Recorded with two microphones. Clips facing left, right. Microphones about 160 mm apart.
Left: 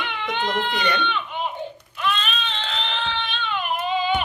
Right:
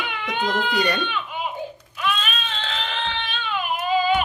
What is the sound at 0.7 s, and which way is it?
Speech, 40° right (ahead or behind).